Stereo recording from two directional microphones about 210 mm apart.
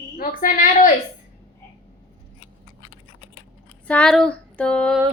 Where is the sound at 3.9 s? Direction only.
5° left (ahead or behind).